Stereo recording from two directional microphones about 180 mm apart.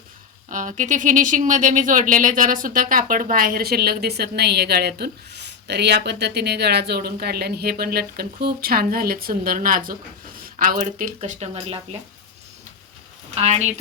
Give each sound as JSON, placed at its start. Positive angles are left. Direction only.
{"t": 0.5, "sound": "speech", "side_deg": -45}
{"t": 13.3, "sound": "speech", "side_deg": -35}